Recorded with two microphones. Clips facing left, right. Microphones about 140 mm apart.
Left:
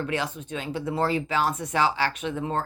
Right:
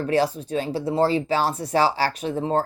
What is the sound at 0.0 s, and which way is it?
A woman's voice, 35° right (ahead or behind).